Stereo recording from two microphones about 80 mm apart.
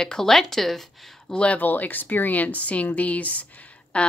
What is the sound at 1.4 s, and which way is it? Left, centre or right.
A woman's voice, centre.